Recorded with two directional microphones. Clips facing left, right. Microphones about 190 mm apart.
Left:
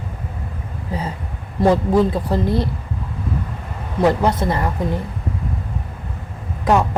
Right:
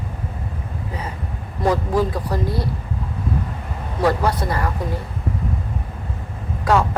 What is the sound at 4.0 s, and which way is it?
Speech, 20° left (ahead or behind).